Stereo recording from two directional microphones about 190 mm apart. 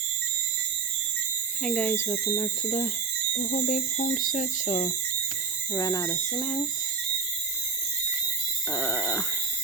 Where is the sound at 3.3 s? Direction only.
45° left (ahead or behind).